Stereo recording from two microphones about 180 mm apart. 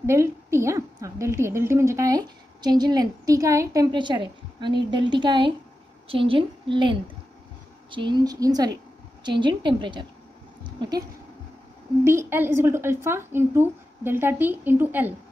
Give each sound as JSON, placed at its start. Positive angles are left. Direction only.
{"t": 0.0, "sound": "a woman's voice", "side_deg": -15}
{"t": 10.6, "sound": "a sound", "side_deg": -25}
{"t": 12.0, "sound": "a woman's voice", "side_deg": -15}